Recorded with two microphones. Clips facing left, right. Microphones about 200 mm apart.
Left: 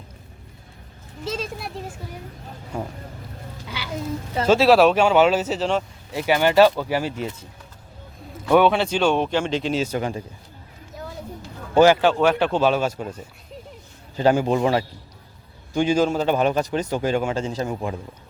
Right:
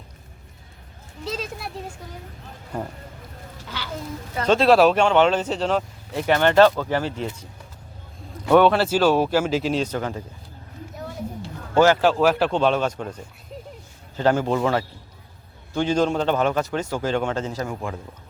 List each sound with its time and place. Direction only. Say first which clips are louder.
1.2 s speech: left 1 dB; centre (ahead or behind)
4.4 s speech: left 1 dB; 5° left (ahead or behind)
8.4 s speech: right 1 dB; centre (ahead or behind)
9.8 s speech: left 1 dB; 15° left (ahead or behind)
11.7 s a man's voice: left 2 dB; 15° left (ahead or behind)
12.0 s speech: even; centre (ahead or behind)
17.5 s a man's voice: left 2 dB; 20° left (ahead or behind)